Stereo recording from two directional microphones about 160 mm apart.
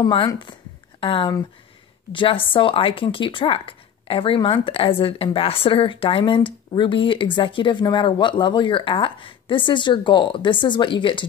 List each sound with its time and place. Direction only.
0.0 s speech: 35° left (ahead or behind)